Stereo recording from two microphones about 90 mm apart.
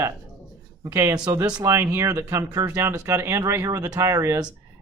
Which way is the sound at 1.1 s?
45° right (ahead or behind).